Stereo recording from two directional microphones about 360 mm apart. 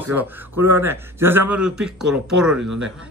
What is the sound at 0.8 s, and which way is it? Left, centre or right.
Speech, centre.